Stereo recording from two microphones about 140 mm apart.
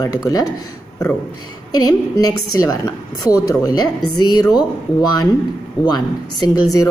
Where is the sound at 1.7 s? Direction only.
25° left (ahead or behind).